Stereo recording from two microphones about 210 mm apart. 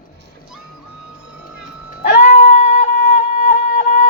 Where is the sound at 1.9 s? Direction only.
40° left (ahead or behind).